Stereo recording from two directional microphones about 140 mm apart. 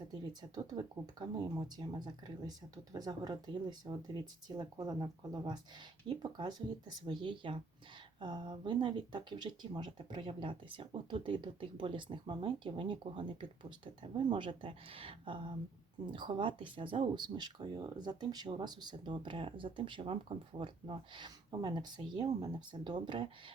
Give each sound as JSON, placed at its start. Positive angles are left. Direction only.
{"t": 0.1, "sound": "speech", "side_deg": -30}